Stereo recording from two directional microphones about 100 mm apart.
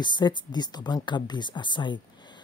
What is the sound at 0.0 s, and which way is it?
Speech, 50° left (ahead or behind).